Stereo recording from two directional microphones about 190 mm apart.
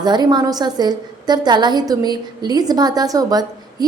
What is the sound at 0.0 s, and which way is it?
A woman's voice, 20° right (ahead or behind).